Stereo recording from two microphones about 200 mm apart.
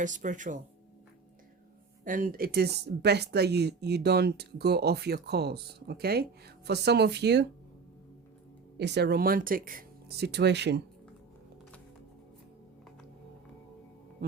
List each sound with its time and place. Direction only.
0.0 s speech: 40° right (ahead or behind)
2.0 s speech: 45° right (ahead or behind)
8.8 s speech: 55° right (ahead or behind)